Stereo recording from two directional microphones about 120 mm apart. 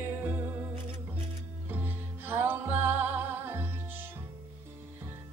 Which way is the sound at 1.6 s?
15° right (ahead or behind).